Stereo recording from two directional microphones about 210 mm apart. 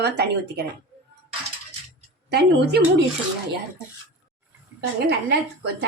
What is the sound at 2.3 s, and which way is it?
Speech, 50° right (ahead or behind).